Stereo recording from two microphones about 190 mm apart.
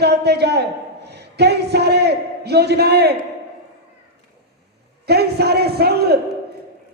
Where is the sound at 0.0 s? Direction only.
60° right (ahead or behind).